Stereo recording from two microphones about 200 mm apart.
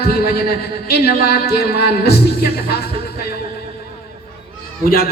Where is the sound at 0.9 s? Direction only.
55° left (ahead or behind).